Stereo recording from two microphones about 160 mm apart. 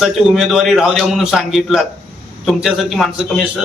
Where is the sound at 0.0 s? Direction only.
Centre (ahead or behind).